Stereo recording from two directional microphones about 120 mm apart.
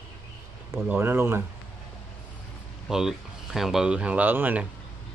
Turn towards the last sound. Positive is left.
turn(degrees=-15)  # may be behind; listen again after turning